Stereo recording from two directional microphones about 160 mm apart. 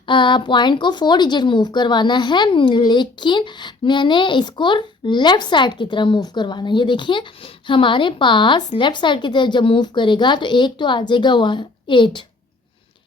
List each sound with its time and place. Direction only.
0.0 s speech: 30° left (ahead or behind)